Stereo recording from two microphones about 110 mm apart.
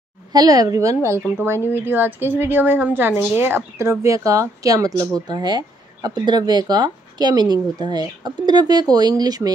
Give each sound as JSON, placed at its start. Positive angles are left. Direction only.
{"t": 0.3, "sound": "a woman's voice", "side_deg": -35}